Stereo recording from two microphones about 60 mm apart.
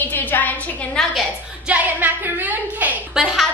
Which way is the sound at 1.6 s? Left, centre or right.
Right.